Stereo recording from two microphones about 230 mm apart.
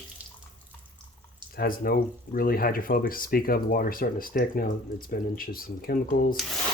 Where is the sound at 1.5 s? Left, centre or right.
Left.